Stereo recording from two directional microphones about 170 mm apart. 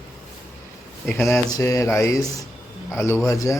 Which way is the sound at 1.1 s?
15° left (ahead or behind).